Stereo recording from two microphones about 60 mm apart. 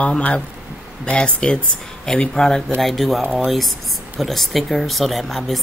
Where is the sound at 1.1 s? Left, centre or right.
Centre.